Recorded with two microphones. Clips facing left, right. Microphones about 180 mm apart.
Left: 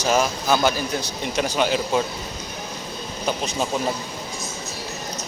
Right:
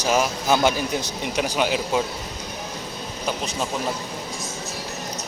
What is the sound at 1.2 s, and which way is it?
Speech, 10° right (ahead or behind).